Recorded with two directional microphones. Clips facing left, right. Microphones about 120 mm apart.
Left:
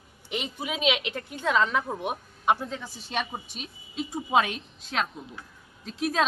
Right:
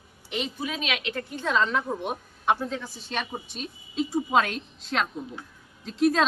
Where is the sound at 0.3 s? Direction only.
15° left (ahead or behind).